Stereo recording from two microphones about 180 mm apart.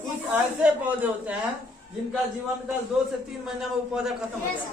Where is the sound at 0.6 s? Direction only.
10° right (ahead or behind).